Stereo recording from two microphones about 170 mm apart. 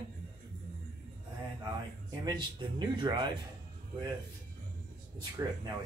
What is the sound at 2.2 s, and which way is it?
Speech, 25° right (ahead or behind).